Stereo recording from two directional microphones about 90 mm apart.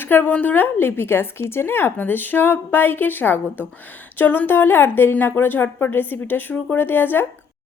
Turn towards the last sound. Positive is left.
turn(degrees=20)  # may be behind; listen again after turning